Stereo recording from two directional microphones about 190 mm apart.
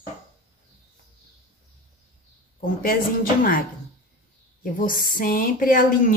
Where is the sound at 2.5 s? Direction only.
45° left (ahead or behind).